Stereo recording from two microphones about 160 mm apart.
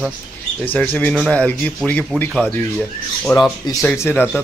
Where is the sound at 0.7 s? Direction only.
10° left (ahead or behind).